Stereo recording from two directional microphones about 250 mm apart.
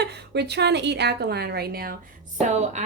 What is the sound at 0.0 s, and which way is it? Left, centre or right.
Speech, right.